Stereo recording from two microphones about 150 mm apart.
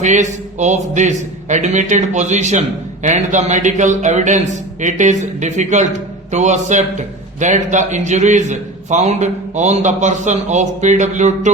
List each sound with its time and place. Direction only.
0.0 s a man's voice: 55° right (ahead or behind)